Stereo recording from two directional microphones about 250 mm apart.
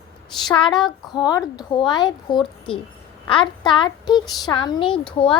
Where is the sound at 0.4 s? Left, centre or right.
Centre.